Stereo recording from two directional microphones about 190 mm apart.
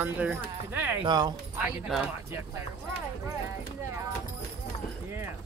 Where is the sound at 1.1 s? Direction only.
20° right (ahead or behind).